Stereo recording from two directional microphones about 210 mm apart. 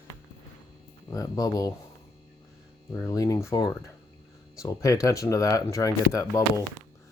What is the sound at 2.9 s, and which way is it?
Speech, 15° left (ahead or behind).